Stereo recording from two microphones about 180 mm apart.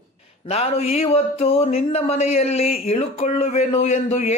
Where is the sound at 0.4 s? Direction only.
35° left (ahead or behind).